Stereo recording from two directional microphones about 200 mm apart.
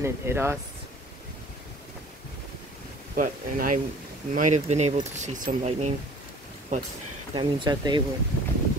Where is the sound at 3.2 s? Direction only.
40° right (ahead or behind).